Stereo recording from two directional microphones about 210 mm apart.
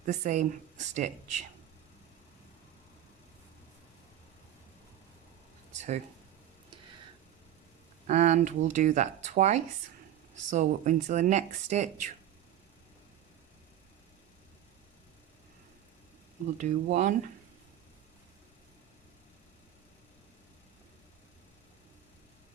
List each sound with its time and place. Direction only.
0.0 s speech: 35° right (ahead or behind)
8.0 s speech: 35° right (ahead or behind)
16.6 s speech: 35° right (ahead or behind)